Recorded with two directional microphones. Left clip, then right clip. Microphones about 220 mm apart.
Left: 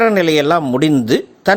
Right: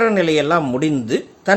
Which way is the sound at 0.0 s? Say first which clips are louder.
Left 3 dB; 35° left (ahead or behind).